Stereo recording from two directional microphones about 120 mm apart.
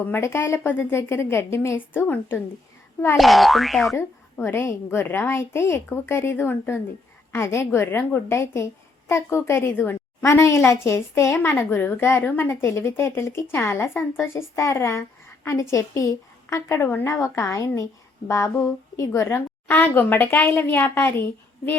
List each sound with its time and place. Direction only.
0.0 s a woman's voice: 20° left (ahead or behind)
3.2 s speech: centre (ahead or behind)
3.9 s a woman's voice: 20° left (ahead or behind)